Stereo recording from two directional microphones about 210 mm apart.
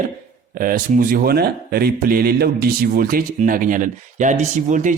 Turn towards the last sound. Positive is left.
turn(degrees=-35)  # may be behind; listen again after turning